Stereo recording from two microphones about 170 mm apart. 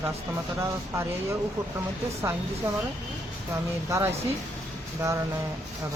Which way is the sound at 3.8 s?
15° right (ahead or behind).